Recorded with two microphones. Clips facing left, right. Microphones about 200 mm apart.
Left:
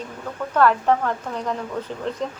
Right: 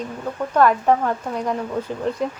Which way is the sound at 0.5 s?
15° right (ahead or behind).